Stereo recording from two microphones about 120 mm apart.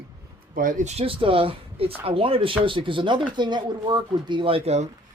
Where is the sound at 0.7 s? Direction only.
65° right (ahead or behind).